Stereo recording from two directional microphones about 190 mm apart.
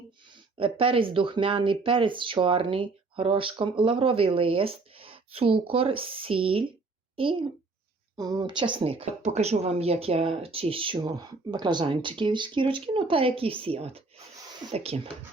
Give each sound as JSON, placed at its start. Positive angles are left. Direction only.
{"t": 0.5, "sound": "speech", "side_deg": -30}